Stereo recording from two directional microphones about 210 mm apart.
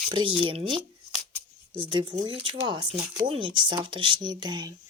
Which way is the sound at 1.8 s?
25° right (ahead or behind).